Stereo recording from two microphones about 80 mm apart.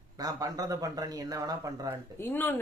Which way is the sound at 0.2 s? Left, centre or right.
Right.